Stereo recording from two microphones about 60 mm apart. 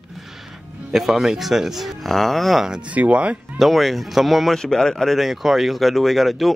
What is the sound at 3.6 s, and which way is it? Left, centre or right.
Speech, centre.